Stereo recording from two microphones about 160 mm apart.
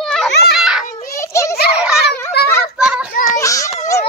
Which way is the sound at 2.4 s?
90° left.